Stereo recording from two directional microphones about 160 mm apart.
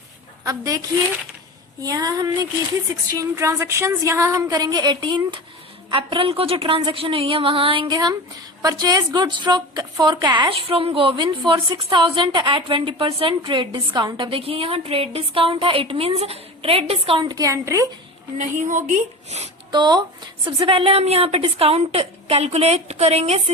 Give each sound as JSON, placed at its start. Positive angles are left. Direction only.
{"t": 0.4, "sound": "a woman's voice", "side_deg": -20}
{"t": 1.8, "sound": "a woman's voice", "side_deg": -25}
{"t": 18.3, "sound": "a woman's voice", "side_deg": -50}
{"t": 19.7, "sound": "a woman's voice", "side_deg": -30}